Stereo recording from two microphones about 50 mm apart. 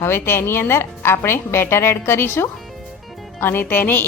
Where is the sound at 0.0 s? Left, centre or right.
Left.